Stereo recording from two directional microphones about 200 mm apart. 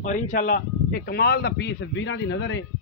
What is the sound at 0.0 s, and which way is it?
Speech, 40° left (ahead or behind).